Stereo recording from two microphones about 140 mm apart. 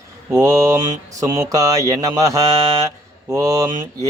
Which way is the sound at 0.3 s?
20° right (ahead or behind).